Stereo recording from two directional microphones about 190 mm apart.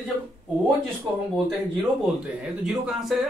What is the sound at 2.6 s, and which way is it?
Speech, centre (ahead or behind).